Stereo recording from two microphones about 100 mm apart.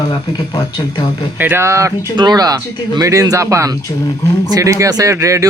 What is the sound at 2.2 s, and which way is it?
Speech, 45° right (ahead or behind).